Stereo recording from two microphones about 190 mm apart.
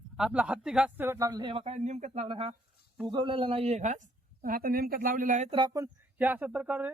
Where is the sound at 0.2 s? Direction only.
5° right (ahead or behind); by 4.0 s 40° right (ahead or behind).